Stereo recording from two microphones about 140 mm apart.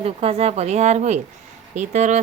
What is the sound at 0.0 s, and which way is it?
Speech, 45° right (ahead or behind).